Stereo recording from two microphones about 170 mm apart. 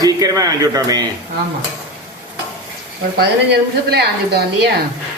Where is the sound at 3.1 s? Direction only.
70° right (ahead or behind).